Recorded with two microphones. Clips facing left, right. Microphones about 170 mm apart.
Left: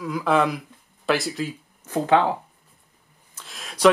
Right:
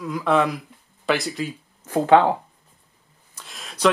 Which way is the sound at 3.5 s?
Centre (ahead or behind).